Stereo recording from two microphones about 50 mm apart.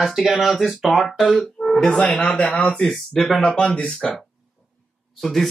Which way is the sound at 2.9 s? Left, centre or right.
Centre.